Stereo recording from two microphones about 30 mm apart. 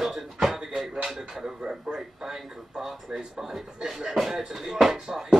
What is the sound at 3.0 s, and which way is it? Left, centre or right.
Speech, right.